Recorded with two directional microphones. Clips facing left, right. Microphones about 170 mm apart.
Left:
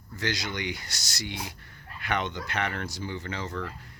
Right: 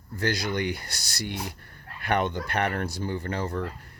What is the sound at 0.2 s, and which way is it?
Speech, 55° right (ahead or behind).